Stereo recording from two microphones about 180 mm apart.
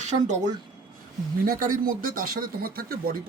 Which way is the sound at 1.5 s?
50° right (ahead or behind).